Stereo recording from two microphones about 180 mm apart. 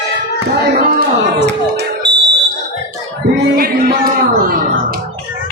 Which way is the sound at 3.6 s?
55° right (ahead or behind).